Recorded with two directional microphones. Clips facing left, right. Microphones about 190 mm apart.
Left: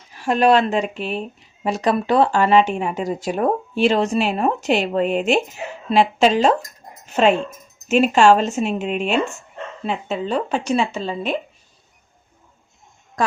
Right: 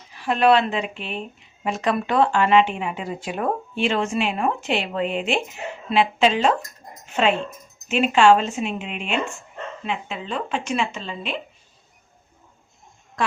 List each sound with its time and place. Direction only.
0.1 s speech: 45° left (ahead or behind)
7.0 s a sound: 40° left (ahead or behind)
7.9 s speech: 45° left (ahead or behind)